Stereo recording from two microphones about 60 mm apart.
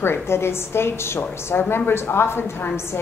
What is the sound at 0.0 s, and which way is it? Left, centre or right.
A woman's voice, left.